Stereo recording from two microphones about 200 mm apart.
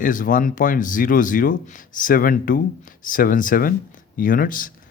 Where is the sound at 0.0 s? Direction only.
40° left (ahead or behind).